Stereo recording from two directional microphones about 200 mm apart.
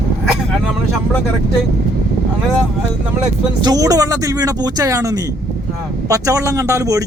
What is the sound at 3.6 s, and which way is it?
Speech, 20° right (ahead or behind).